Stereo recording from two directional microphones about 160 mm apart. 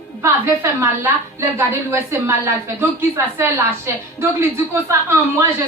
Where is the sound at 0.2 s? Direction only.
15° right (ahead or behind).